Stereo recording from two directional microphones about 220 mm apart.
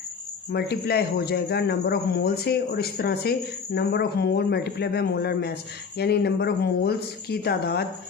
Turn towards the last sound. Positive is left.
turn(degrees=45)  # may be behind; listen again after turning